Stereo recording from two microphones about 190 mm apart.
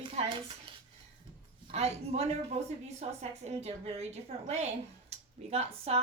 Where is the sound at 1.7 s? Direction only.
35° right (ahead or behind).